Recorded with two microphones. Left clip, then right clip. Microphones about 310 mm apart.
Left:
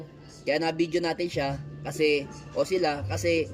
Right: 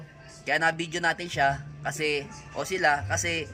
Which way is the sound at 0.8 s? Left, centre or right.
Right.